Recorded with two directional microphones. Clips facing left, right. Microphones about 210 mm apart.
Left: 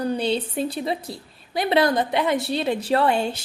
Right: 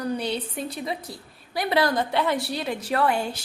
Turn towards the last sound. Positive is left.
turn(degrees=25)  # may be behind; listen again after turning